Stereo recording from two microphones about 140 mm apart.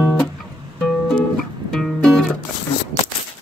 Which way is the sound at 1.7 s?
5° left (ahead or behind).